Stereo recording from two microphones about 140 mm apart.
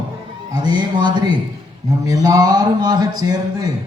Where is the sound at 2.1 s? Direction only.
25° right (ahead or behind).